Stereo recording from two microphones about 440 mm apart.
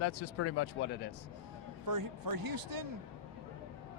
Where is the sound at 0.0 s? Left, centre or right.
Left.